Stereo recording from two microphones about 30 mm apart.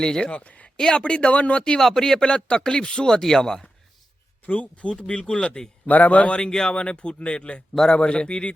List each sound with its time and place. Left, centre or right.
0.0 s speech: left
0.3 s speech: left
1.8 s speech: centre
2.2 s speech: left; by 3.7 s centre
4.4 s speech: left
4.9 s speech: left
5.9 s speech: left
6.5 s speech: left